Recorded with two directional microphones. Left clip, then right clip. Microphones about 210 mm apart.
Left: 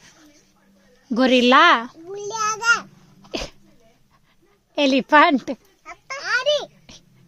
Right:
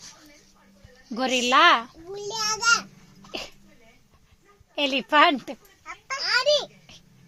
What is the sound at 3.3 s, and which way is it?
Sneeze, 50° left (ahead or behind).